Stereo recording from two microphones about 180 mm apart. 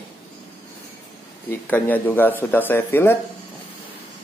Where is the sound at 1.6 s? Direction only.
10° left (ahead or behind).